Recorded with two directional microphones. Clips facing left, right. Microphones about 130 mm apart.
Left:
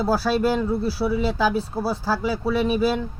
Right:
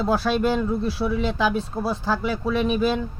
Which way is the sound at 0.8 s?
5° left (ahead or behind).